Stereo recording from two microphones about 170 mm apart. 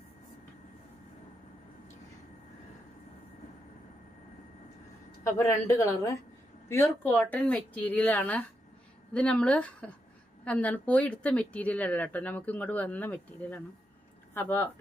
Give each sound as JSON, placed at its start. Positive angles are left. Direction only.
{"t": 5.2, "sound": "speech", "side_deg": 15}